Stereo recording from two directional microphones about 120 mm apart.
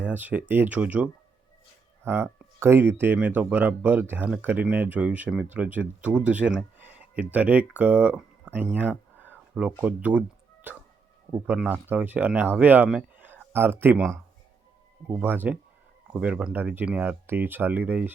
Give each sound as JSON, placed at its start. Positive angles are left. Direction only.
{"t": 0.0, "sound": "speech", "side_deg": -15}
{"t": 8.5, "sound": "a sound", "side_deg": -15}
{"t": 9.6, "sound": "speech", "side_deg": -10}